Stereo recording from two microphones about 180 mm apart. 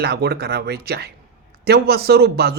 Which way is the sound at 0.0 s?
65° right (ahead or behind).